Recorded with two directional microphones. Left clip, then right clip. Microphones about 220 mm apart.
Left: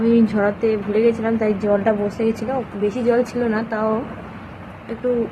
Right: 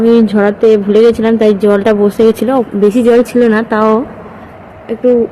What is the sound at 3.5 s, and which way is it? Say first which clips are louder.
Speech: right 11 dB; 30° right (ahead or behind).